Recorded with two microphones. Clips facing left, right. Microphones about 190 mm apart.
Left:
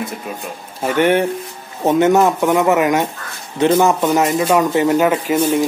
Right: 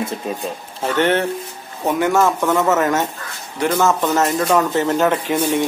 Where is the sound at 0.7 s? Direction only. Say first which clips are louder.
Left 3 dB; 10° left (ahead or behind).